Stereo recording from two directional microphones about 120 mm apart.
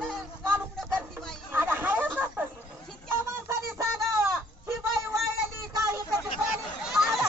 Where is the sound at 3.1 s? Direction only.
20° right (ahead or behind).